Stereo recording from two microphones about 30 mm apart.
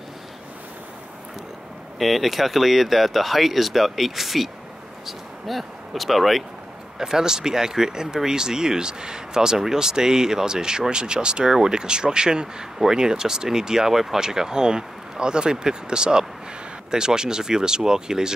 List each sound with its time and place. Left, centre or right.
2.0 s speech: centre
7.0 s speech: centre